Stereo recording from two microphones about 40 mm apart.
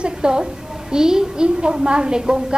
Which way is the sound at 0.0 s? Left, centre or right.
Right.